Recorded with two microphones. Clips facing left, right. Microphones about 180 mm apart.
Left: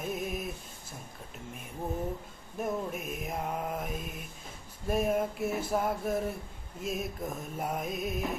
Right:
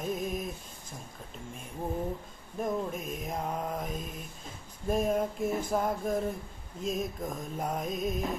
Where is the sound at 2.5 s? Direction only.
5° left (ahead or behind).